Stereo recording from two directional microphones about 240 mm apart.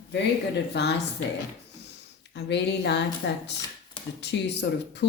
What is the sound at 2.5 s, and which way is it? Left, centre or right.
A woman's voice, left.